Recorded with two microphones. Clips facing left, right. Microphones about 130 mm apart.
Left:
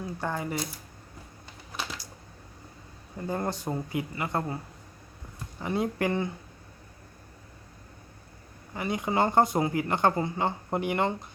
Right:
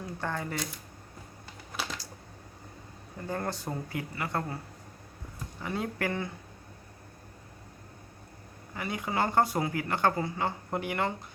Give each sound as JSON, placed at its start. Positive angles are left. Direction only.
{"t": 0.2, "sound": "speech", "side_deg": 10}
{"t": 1.7, "sound": "typing", "side_deg": 0}
{"t": 3.2, "sound": "speech", "side_deg": 15}
{"t": 5.6, "sound": "speech", "side_deg": 20}
{"t": 8.7, "sound": "speech", "side_deg": 20}